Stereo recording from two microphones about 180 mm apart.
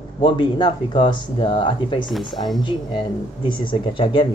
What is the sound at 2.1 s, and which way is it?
Speech, centre (ahead or behind).